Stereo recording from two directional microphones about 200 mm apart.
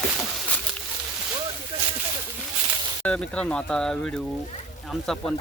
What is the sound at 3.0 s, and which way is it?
Speech, 5° left (ahead or behind).